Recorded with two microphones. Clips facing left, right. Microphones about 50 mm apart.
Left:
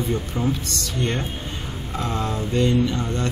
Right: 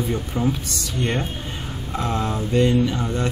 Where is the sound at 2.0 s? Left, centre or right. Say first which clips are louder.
Right 2 dB; right.